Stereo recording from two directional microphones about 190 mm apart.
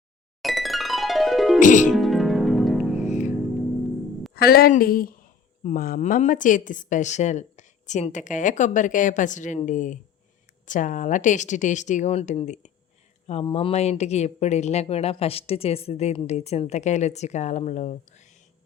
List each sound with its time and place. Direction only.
0.4 s music: centre (ahead or behind)
1.5 s music: 40° left (ahead or behind)
1.9 s music: centre (ahead or behind)
4.4 s speech: 55° left (ahead or behind)